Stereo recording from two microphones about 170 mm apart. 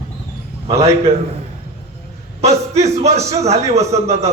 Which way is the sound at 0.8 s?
40° right (ahead or behind).